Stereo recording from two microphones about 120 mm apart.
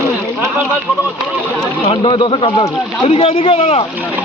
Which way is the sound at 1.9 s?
45° left (ahead or behind).